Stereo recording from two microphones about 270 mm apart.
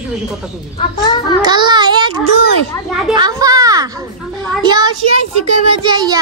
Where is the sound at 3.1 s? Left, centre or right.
Centre.